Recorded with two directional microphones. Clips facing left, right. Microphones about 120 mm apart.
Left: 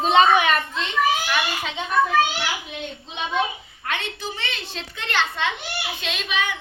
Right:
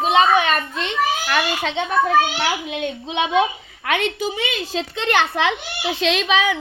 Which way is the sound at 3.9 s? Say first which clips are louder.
Right 7 dB; 85° right.